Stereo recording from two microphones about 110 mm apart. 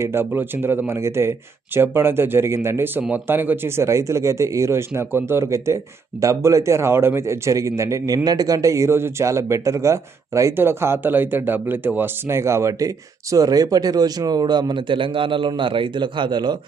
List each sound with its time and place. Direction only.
0.0 s speech: 20° right (ahead or behind); by 16.6 s 45° right (ahead or behind)